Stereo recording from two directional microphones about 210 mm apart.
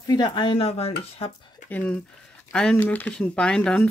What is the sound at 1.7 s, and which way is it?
Speech, 5° left (ahead or behind).